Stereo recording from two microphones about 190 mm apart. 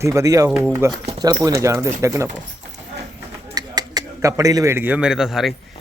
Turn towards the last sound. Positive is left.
turn(degrees=0)  # may be behind; listen again after turning